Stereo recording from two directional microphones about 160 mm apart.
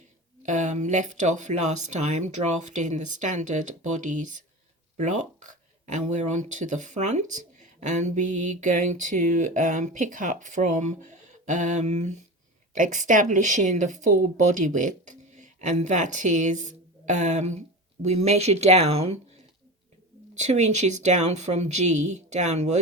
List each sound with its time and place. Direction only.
0.4 s speech: 50° right (ahead or behind)
20.3 s speech: 45° right (ahead or behind)